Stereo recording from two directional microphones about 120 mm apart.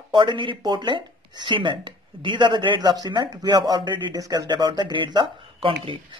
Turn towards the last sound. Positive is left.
turn(degrees=-45)  # may be behind; listen again after turning